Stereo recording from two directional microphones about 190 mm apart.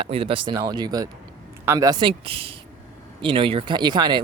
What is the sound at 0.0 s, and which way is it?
Speech, 30° right (ahead or behind).